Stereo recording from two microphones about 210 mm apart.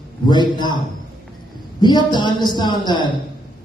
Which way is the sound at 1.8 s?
20° left (ahead or behind).